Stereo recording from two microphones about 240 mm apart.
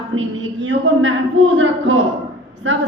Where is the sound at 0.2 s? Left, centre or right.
Right.